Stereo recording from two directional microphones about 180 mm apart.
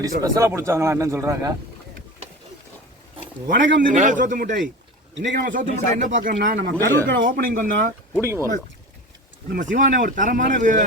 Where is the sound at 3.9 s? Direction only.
45° right (ahead or behind).